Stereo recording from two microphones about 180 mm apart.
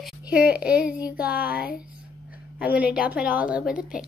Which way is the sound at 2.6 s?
10° right (ahead or behind).